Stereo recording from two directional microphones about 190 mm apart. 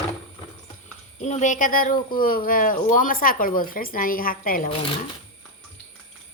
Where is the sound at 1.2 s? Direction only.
40° left (ahead or behind).